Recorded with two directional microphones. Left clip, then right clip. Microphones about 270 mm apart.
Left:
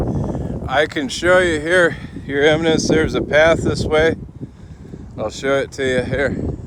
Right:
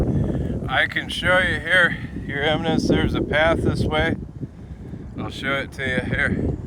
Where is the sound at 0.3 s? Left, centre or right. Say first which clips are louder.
Left 3 dB; centre.